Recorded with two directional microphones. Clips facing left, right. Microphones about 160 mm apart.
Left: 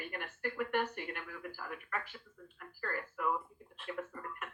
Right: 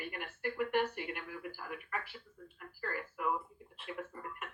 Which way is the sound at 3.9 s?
20° right (ahead or behind).